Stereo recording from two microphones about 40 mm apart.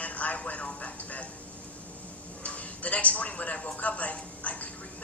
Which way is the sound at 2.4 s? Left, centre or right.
Left.